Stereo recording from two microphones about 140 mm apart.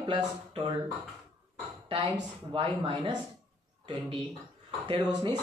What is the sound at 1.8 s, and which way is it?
A woman's voice, 35° right (ahead or behind).